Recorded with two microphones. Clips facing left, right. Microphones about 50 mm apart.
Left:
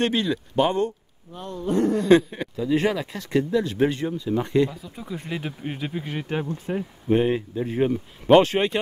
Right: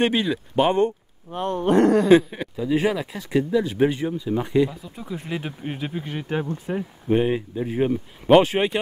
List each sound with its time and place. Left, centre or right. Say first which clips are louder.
0.0 s speech: right 2 dB; centre
1.3 s speech: right 6 dB; right
2.0 s speech: right 1 dB; centre